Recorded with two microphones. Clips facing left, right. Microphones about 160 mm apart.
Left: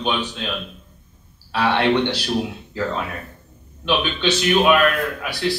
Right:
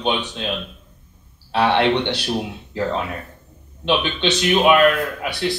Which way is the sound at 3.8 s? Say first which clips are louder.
Right 1 dB; 20° right (ahead or behind).